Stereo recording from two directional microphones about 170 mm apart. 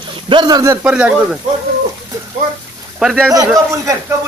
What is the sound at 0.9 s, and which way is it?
Speech, 5° right (ahead or behind).